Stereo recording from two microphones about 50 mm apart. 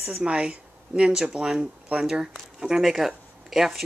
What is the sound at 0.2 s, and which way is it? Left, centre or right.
Speech, right.